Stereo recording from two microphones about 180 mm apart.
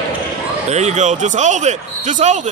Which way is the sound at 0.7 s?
40° right (ahead or behind).